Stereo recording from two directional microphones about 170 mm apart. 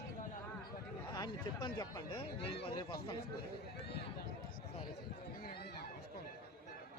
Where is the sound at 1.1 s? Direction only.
25° left (ahead or behind).